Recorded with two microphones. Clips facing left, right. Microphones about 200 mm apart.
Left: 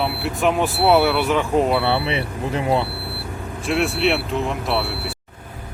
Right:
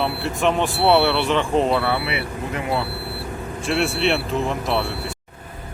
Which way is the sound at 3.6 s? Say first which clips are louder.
Left 1 dB; centre (ahead or behind).